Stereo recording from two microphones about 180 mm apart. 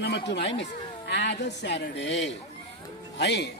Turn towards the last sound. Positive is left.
turn(degrees=70)  # may be behind; listen again after turning